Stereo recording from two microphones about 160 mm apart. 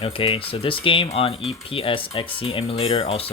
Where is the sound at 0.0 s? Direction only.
35° left (ahead or behind).